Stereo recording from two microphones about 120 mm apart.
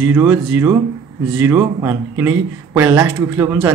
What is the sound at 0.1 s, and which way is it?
A man's voice, 15° right (ahead or behind).